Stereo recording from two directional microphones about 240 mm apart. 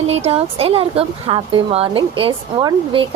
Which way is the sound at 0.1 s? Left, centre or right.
Right.